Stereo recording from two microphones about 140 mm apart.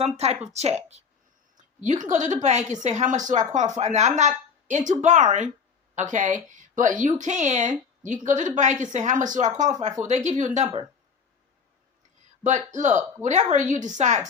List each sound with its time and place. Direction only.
0.0 s a woman's voice: 50° right (ahead or behind)
1.5 s a woman's voice: 60° right (ahead or behind)
12.4 s a woman's voice: 60° right (ahead or behind)